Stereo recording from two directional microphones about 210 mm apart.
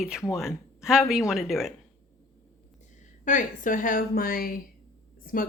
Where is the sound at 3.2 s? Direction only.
35° left (ahead or behind).